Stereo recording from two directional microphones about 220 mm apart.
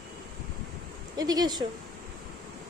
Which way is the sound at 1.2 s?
15° right (ahead or behind).